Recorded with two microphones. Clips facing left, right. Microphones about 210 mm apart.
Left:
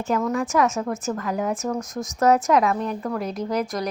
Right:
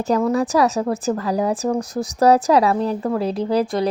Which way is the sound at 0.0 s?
35° right (ahead or behind).